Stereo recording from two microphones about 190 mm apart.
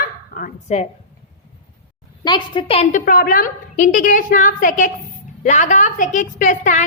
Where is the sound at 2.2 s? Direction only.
25° left (ahead or behind).